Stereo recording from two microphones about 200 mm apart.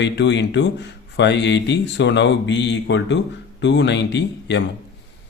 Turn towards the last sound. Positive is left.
turn(degrees=60)  # may be behind; listen again after turning